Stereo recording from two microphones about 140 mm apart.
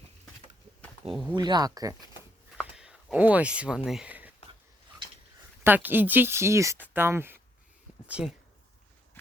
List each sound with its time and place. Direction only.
1.1 s speech: 10° right (ahead or behind)
1.4 s speech: 30° right (ahead or behind)
2.6 s a sound: 5° right (ahead or behind)
5.6 s speech: 15° right (ahead or behind)